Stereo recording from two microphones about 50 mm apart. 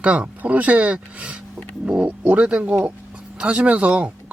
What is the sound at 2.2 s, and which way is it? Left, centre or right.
Speech, right.